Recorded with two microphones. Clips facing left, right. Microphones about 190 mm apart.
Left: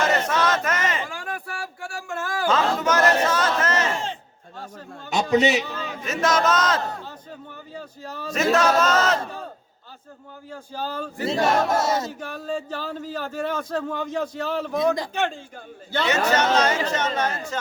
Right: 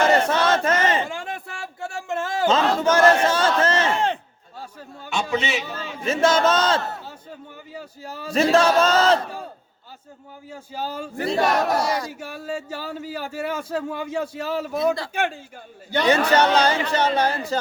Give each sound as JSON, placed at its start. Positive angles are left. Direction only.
{"t": 0.3, "sound": "a sound", "side_deg": -30}
{"t": 3.9, "sound": "a sound", "side_deg": -60}
{"t": 5.0, "sound": "a man's voice", "side_deg": 40}
{"t": 6.1, "sound": "speech", "side_deg": -30}
{"t": 7.7, "sound": "speech", "side_deg": -10}
{"t": 8.3, "sound": "speech", "side_deg": -30}
{"t": 10.5, "sound": "speech", "side_deg": -10}
{"t": 11.3, "sound": "battle cry", "side_deg": 25}
{"t": 12.2, "sound": "speech", "side_deg": -10}
{"t": 16.0, "sound": "speech", "side_deg": -35}